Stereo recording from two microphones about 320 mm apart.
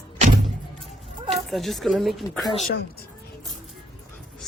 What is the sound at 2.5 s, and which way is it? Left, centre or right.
Speech, left.